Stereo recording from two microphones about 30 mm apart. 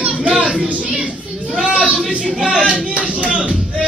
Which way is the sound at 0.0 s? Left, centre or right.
Right.